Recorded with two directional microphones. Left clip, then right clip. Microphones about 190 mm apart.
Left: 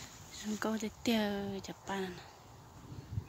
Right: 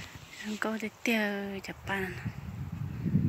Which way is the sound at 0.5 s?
5° left (ahead or behind).